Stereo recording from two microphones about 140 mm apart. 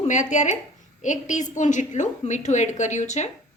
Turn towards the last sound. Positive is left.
turn(degrees=55)  # may be behind; listen again after turning